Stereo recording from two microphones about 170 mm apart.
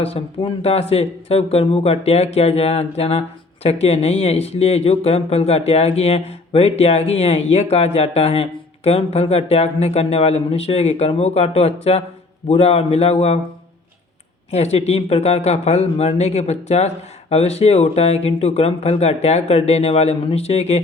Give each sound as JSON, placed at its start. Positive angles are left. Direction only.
{"t": 0.0, "sound": "speech", "side_deg": 35}
{"t": 14.5, "sound": "speech", "side_deg": 40}